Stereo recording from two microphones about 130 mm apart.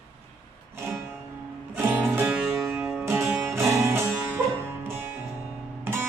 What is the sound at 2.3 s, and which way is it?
Music, 10° right (ahead or behind).